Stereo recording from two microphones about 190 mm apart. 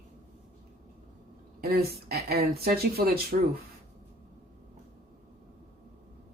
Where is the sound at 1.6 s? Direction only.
55° right (ahead or behind).